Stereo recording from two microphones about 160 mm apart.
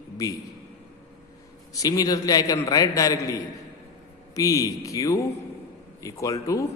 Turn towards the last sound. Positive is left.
turn(degrees=20)  # may be behind; listen again after turning